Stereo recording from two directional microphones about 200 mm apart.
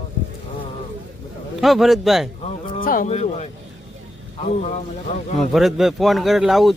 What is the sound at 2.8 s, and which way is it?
Speech, 45° left (ahead or behind).